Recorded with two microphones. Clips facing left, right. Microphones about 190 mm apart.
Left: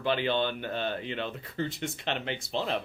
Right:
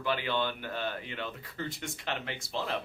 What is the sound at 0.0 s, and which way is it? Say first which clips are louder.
Speech: left 4 dB; 25° left (ahead or behind).